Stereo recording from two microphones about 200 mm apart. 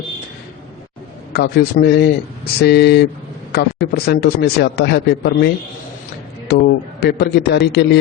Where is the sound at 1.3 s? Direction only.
50° left (ahead or behind).